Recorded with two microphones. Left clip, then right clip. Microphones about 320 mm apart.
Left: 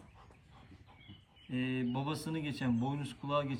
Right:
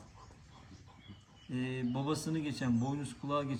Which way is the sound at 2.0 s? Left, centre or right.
Centre.